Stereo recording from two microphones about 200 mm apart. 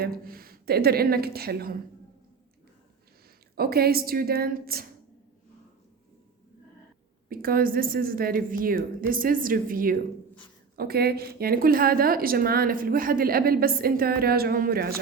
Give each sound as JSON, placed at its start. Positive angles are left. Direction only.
{"t": 0.0, "sound": "a woman's voice", "side_deg": -45}
{"t": 3.5, "sound": "a woman's voice", "side_deg": -50}
{"t": 7.3, "sound": "a woman's voice", "side_deg": -45}